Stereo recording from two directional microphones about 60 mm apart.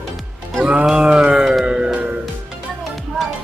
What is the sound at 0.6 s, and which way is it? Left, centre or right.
Music, centre.